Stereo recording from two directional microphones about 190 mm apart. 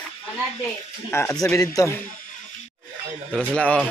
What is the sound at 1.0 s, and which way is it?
Speech, 15° left (ahead or behind).